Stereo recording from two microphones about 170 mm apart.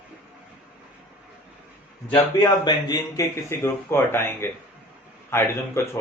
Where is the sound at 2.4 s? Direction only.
25° left (ahead or behind).